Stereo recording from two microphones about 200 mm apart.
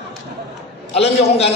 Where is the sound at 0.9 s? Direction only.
30° left (ahead or behind).